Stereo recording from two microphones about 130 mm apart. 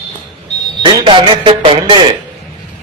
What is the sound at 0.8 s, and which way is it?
A man's voice, 35° right (ahead or behind).